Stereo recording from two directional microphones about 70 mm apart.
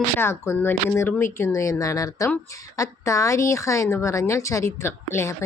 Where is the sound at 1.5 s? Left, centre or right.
Left.